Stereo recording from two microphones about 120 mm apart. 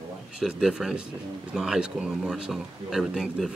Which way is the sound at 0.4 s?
5° right (ahead or behind).